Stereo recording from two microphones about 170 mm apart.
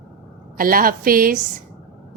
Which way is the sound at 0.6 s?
55° right (ahead or behind).